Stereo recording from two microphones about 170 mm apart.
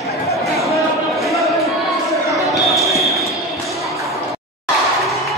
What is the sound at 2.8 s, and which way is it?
Basketball bounce, centre (ahead or behind).